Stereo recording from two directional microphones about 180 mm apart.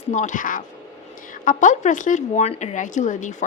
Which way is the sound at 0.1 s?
45° left (ahead or behind).